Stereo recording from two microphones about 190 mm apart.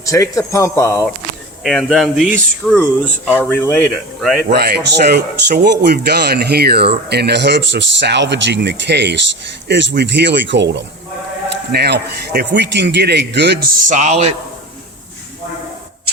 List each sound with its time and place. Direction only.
0.0 s a man's voice: 15° left (ahead or behind)
1.6 s speech: centre (ahead or behind)
4.5 s speech: 60° right (ahead or behind)
11.7 s speech: 60° right (ahead or behind)
13.8 s speech: 40° right (ahead or behind)